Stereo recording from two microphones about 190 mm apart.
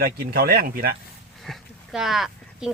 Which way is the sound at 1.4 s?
Centre (ahead or behind).